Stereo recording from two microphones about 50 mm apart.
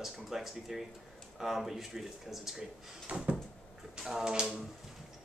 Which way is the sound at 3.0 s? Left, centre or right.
Right.